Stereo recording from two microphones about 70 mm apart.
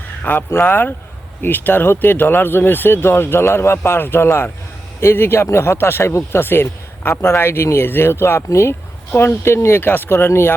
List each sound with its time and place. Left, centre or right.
0.2 s speech: left